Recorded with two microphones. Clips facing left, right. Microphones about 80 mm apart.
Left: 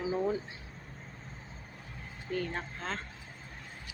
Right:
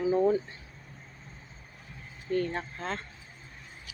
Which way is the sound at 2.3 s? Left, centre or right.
Centre.